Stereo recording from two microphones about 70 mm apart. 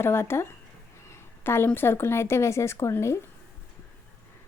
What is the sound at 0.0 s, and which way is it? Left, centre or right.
A woman's voice, left.